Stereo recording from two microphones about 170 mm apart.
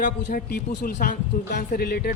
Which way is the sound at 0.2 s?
70° left (ahead or behind).